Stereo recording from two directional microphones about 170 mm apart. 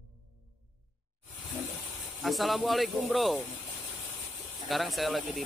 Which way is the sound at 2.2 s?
Centre (ahead or behind).